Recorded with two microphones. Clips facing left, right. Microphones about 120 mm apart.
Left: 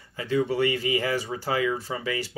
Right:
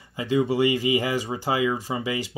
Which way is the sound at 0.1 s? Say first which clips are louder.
Right 2 dB; 20° right (ahead or behind).